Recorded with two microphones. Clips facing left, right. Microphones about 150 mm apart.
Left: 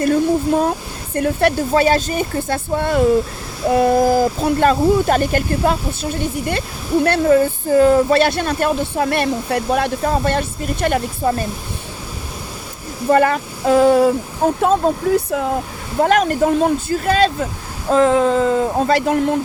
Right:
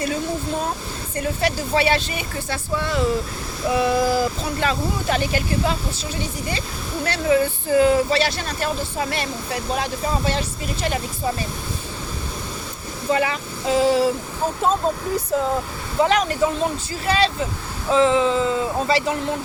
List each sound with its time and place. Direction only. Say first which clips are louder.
0.0 s speech: left 9 dB; 55° left (ahead or behind)
13.1 s speech: left 7 dB; 50° left (ahead or behind)
16.0 s speech: left 4 dB; 50° left (ahead or behind)